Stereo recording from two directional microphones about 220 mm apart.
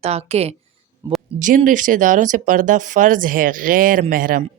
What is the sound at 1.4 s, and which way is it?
Speech, 35° right (ahead or behind).